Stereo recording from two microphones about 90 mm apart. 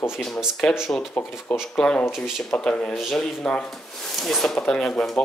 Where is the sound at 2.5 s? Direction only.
10° left (ahead or behind).